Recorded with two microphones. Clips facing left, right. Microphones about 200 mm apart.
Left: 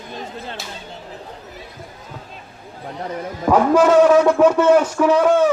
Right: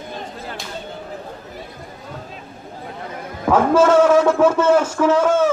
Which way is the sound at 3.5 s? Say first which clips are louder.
Even; 15° left (ahead or behind).